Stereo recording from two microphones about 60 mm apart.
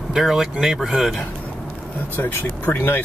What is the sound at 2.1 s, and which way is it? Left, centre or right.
Speech, left.